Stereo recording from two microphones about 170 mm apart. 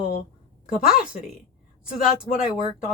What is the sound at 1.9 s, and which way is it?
Speech, 55° left (ahead or behind).